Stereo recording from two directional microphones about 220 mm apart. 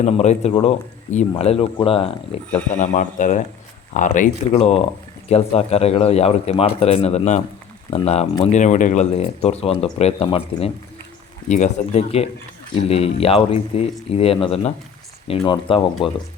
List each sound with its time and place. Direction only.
0.0 s speech: 30° left (ahead or behind)